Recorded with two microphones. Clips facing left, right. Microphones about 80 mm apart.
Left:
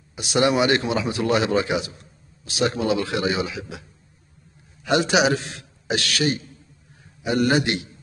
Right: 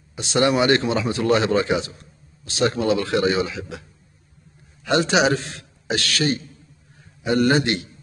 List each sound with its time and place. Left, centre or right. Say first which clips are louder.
0.1 s speech: right 1 dB; centre
4.8 s speech: right 1 dB; centre